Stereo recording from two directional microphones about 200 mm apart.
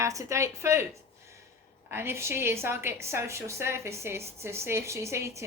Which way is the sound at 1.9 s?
10° right (ahead or behind).